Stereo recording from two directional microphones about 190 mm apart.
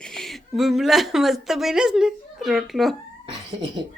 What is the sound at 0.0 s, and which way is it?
A woman's voice, centre (ahead or behind).